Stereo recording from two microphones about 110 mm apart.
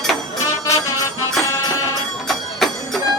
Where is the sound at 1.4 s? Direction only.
25° left (ahead or behind).